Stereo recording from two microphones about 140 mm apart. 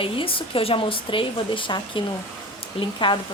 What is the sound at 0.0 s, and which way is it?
A woman's voice, 40° left (ahead or behind).